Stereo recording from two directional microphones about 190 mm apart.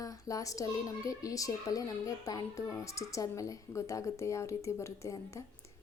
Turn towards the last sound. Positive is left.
turn(degrees=15)  # may be behind; listen again after turning